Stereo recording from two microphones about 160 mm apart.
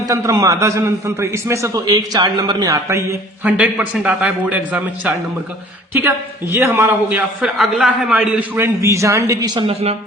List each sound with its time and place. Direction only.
0.1 s a man's voice: 20° right (ahead or behind)
3.6 s a man's voice: 5° right (ahead or behind); by 9.6 s 20° right (ahead or behind)